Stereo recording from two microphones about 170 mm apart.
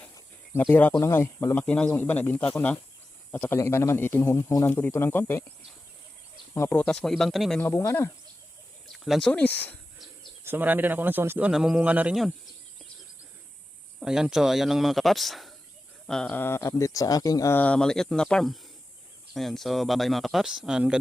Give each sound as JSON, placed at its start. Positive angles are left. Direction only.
{"t": 0.5, "sound": "speech", "side_deg": 10}
{"t": 6.5, "sound": "speech", "side_deg": 15}
{"t": 7.6, "sound": "speech", "side_deg": 15}
{"t": 8.9, "sound": "speech", "side_deg": 0}
{"t": 10.4, "sound": "speech", "side_deg": -10}
{"t": 14.0, "sound": "speech", "side_deg": -5}